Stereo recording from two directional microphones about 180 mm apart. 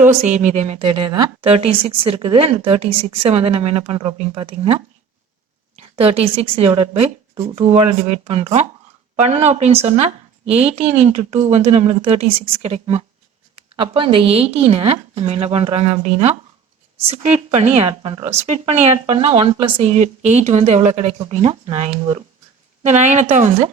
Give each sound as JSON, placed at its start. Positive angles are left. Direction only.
{"t": 0.0, "sound": "a woman's voice", "side_deg": -40}